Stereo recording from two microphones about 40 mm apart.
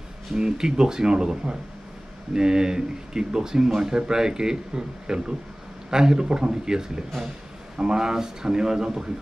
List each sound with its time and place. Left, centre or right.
0.4 s speech: centre